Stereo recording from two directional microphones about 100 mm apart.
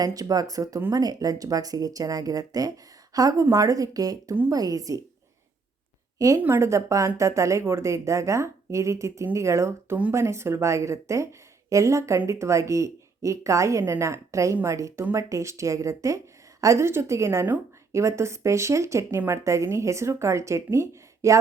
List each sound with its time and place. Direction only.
0.0 s a woman's voice: 40° right (ahead or behind)
6.1 s a woman's voice: 35° right (ahead or behind)